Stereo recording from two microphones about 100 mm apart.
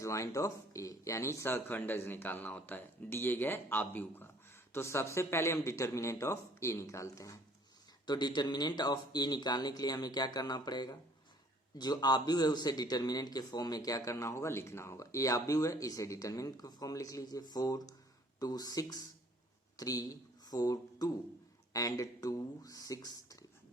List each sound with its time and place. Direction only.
0.0 s speech: 30° left (ahead or behind)
8.0 s speech: 45° left (ahead or behind)